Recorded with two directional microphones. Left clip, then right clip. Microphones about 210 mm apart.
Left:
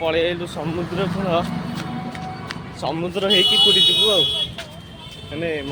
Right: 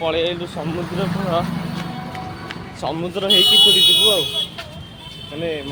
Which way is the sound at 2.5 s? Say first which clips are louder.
Even; 5° left (ahead or behind).